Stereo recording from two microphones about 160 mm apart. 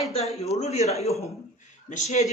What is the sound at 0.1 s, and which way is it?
A woman's voice, 40° left (ahead or behind).